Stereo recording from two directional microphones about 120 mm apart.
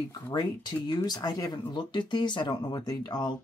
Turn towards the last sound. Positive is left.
turn(degrees=35)  # may be behind; listen again after turning